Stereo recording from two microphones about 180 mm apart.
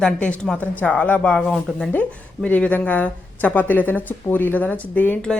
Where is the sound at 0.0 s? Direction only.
5° left (ahead or behind).